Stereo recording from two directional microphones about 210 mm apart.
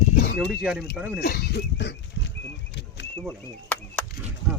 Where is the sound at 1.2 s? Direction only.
50° left (ahead or behind).